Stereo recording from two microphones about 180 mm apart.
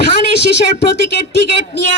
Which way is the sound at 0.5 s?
65° left (ahead or behind).